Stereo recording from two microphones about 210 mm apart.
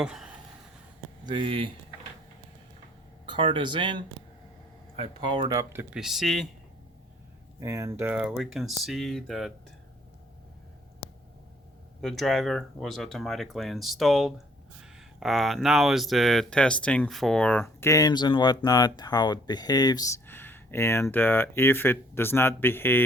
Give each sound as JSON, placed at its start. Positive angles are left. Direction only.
{"t": 0.0, "sound": "speech", "side_deg": -5}
{"t": 1.2, "sound": "speech", "side_deg": -25}
{"t": 3.2, "sound": "speech", "side_deg": -25}
{"t": 5.9, "sound": "speech", "side_deg": 0}
{"t": 7.6, "sound": "speech", "side_deg": -15}
{"t": 12.0, "sound": "speech", "side_deg": 0}